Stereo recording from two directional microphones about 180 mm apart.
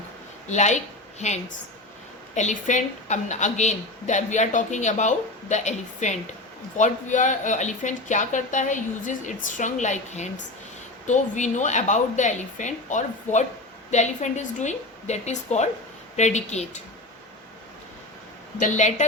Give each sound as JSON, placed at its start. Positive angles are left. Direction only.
{"t": 0.4, "sound": "a woman's voice", "side_deg": 40}
{"t": 18.6, "sound": "a woman's voice", "side_deg": 40}